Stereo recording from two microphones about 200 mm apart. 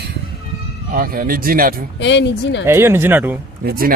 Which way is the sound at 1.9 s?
60° left (ahead or behind).